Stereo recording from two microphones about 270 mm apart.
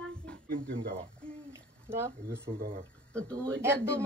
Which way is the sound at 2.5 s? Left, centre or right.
Right.